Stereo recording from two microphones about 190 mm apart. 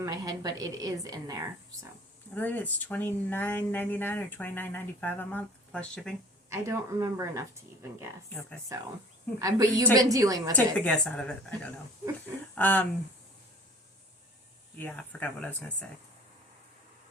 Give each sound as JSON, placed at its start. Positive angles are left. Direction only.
{"t": 0.0, "sound": "a woman's voice", "side_deg": -20}
{"t": 2.3, "sound": "speech", "side_deg": 10}
{"t": 6.5, "sound": "a woman's voice", "side_deg": -15}
{"t": 10.8, "sound": "speech", "side_deg": 5}
{"t": 14.8, "sound": "speech", "side_deg": 5}